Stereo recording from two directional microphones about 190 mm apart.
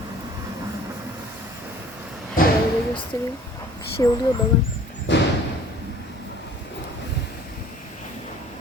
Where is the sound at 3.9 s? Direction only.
20° left (ahead or behind).